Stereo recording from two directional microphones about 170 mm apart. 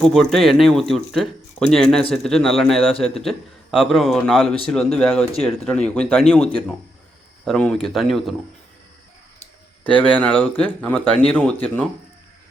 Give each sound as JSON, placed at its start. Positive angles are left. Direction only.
{"t": 0.0, "sound": "speech", "side_deg": 0}
{"t": 9.9, "sound": "speech", "side_deg": 10}